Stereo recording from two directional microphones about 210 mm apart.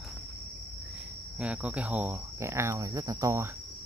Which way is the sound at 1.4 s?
5° right (ahead or behind).